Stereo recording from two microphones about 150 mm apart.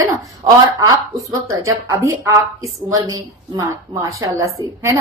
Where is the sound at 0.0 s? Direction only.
20° right (ahead or behind).